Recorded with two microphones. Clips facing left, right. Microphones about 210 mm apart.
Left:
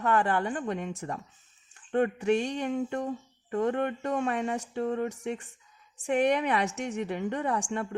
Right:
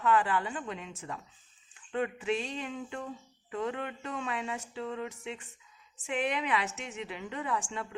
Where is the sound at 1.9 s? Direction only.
50° left (ahead or behind).